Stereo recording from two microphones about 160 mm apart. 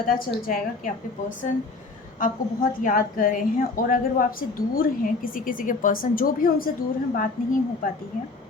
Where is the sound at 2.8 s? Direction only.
55° left (ahead or behind).